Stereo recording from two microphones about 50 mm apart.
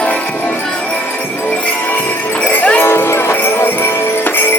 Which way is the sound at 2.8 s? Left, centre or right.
Left.